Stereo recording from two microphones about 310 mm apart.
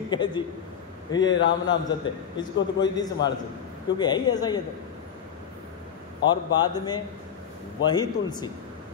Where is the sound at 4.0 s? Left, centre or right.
Centre.